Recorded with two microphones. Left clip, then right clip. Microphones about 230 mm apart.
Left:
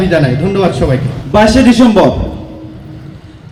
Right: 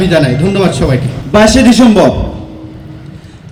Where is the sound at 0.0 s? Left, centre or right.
Right.